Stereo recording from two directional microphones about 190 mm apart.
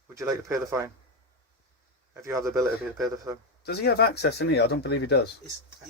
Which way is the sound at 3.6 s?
55° left (ahead or behind).